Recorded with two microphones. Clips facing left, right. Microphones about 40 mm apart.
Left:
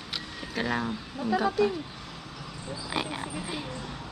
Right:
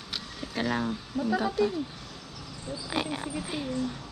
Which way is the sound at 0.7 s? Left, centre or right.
Centre.